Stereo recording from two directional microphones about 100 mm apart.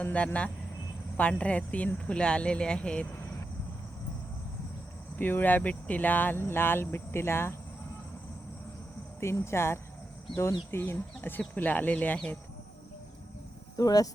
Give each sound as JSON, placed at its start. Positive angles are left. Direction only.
{"t": 0.0, "sound": "speech", "side_deg": 15}
{"t": 5.1, "sound": "speech", "side_deg": 20}
{"t": 9.2, "sound": "speech", "side_deg": 25}
{"t": 13.7, "sound": "speech", "side_deg": 40}